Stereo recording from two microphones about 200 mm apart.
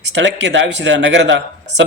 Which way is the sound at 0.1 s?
60° right (ahead or behind).